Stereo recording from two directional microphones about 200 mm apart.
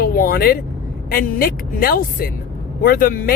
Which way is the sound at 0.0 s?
50° left (ahead or behind).